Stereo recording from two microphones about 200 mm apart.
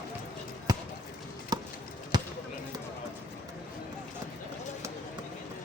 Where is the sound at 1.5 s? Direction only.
20° right (ahead or behind).